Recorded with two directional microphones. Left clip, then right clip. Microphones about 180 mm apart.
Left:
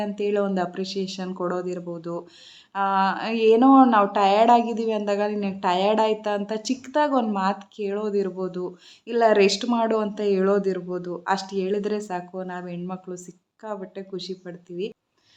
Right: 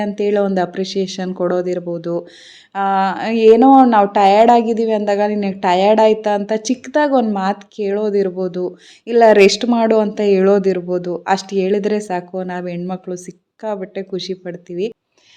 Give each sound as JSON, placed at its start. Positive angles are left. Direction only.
{"t": 0.0, "sound": "speech", "side_deg": -30}